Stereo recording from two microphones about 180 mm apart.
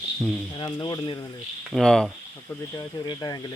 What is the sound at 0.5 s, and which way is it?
Speech, 25° left (ahead or behind).